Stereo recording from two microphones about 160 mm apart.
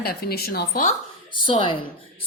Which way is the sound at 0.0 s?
70° left (ahead or behind).